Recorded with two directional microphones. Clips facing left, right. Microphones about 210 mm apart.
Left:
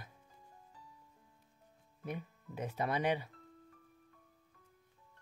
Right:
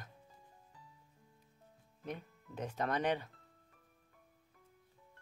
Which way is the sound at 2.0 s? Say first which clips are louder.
Left 2 dB; 10° left (ahead or behind).